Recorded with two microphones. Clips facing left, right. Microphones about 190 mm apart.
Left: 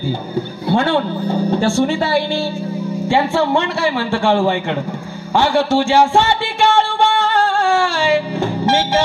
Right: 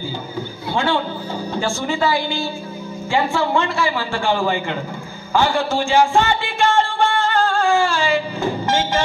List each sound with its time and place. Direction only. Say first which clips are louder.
0.7 s a man's voice: left 4 dB; 60° left (ahead or behind)
5.3 s music: left 4 dB; 75° left (ahead or behind)